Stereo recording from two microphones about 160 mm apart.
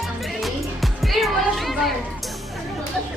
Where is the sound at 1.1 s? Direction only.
Centre (ahead or behind).